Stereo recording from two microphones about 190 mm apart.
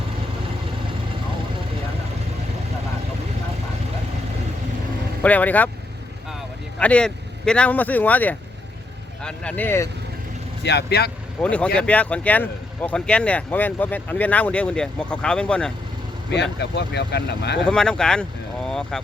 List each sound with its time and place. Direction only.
5.2 s speech: 10° left (ahead or behind)
6.7 s speech: 5° left (ahead or behind)
10.6 s speech: 60° left (ahead or behind)
11.3 s speech: 5° left (ahead or behind)
16.3 s speech: 65° left (ahead or behind)
17.7 s speech: 5° left (ahead or behind)